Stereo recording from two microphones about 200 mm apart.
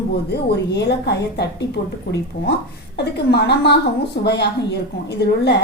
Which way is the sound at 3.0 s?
55° left (ahead or behind).